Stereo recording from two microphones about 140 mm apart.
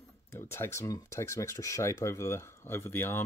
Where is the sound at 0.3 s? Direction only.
15° left (ahead or behind).